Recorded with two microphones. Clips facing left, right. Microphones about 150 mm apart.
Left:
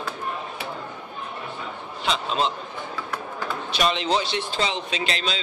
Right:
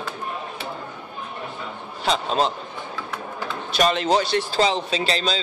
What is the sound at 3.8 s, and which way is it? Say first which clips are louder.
Speech: right 4 dB; 45° right (ahead or behind).